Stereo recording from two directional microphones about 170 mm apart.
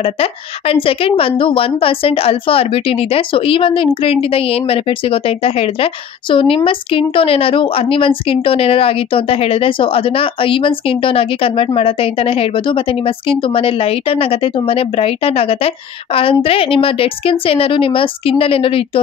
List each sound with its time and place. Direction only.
0.0 s speech: 35° left (ahead or behind)